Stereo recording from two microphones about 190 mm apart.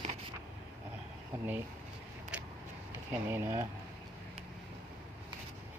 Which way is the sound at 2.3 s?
5° right (ahead or behind).